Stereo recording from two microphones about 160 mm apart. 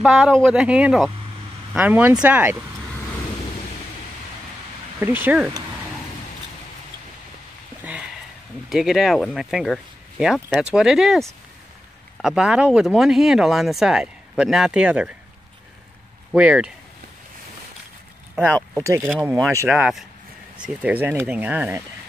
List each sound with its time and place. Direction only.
0.0 s speech: centre (ahead or behind)
5.0 s speech: 10° right (ahead or behind)
8.6 s speech: 5° right (ahead or behind)
16.3 s speech: 5° right (ahead or behind)
18.8 s speech: 15° right (ahead or behind)
19.7 s speech: 5° right (ahead or behind)